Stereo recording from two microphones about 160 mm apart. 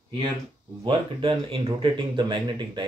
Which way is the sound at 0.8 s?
30° right (ahead or behind).